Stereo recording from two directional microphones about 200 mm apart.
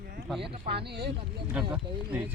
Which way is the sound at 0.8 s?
55° right (ahead or behind).